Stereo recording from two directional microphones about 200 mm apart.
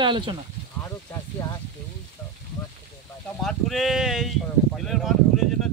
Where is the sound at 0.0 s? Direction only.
25° right (ahead or behind).